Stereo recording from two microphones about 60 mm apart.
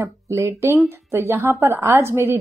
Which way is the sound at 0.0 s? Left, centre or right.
Right.